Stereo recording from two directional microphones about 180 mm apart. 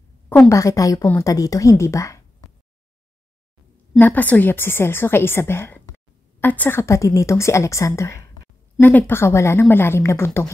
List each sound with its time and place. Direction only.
0.3 s a woman's voice: 15° left (ahead or behind)
4.0 s a woman's voice: 10° left (ahead or behind)